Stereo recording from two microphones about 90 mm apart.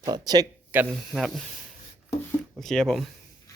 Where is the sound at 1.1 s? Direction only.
Centre (ahead or behind).